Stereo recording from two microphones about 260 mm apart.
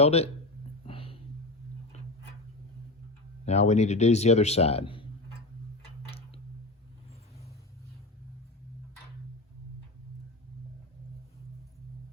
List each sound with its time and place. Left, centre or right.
0.0 s a man's voice: left
0.9 s a sound: left
3.4 s a man's voice: left